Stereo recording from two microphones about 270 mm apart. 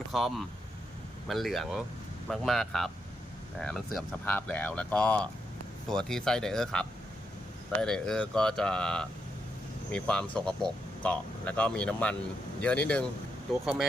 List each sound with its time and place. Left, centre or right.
0.1 s speech: centre